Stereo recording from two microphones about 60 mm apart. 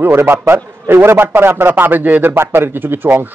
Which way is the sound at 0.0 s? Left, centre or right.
Right.